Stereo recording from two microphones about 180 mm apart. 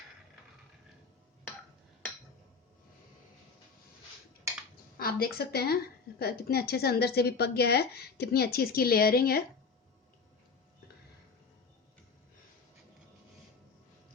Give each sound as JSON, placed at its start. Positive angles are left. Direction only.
{"t": 4.9, "sound": "a woman's voice", "side_deg": 55}